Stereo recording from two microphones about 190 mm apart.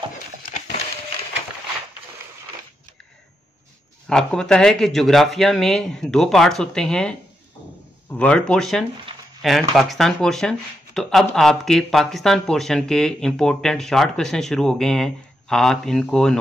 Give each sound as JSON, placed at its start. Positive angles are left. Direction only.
{"t": 0.5, "sound": "a sound", "side_deg": 40}
{"t": 4.1, "sound": "speech", "side_deg": 5}
{"t": 8.2, "sound": "speech", "side_deg": 5}